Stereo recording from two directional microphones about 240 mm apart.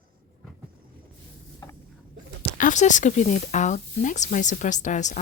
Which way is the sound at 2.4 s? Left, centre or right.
Left.